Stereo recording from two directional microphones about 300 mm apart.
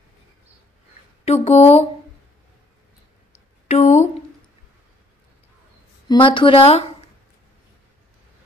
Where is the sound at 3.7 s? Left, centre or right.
Left.